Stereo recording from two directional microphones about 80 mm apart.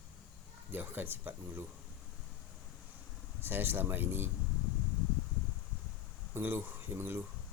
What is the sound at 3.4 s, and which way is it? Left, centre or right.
Speech, right.